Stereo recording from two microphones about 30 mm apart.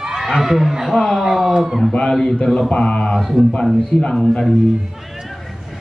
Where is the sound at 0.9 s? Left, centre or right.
Centre.